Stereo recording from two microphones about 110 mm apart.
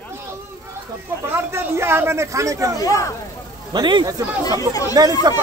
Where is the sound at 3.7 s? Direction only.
40° right (ahead or behind).